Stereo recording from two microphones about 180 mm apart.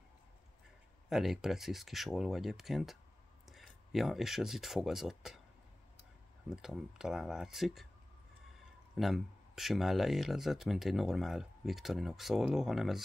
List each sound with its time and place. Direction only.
1.0 s speech: centre (ahead or behind)
6.5 s speech: 5° right (ahead or behind)
8.9 s speech: centre (ahead or behind)